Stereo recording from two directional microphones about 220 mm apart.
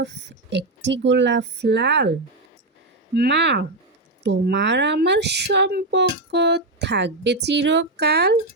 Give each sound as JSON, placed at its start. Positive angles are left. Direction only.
{"t": 0.0, "sound": "speech", "side_deg": -55}